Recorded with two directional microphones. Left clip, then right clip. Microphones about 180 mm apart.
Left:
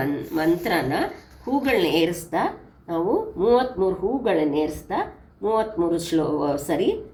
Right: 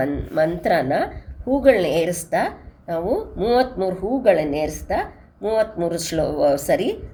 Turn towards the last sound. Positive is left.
turn(degrees=-65)  # may be behind; listen again after turning